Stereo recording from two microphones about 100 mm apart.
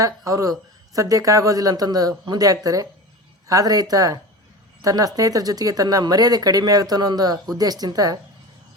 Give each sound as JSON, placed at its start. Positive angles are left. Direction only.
{"t": 0.0, "sound": "speech", "side_deg": -35}